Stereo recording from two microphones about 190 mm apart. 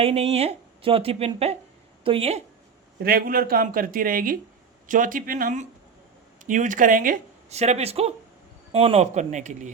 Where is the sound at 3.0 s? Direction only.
50° right (ahead or behind).